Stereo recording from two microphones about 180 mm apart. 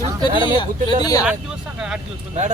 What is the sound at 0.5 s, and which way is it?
Speech, 25° left (ahead or behind).